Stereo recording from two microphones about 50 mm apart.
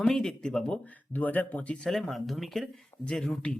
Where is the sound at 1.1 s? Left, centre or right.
Left.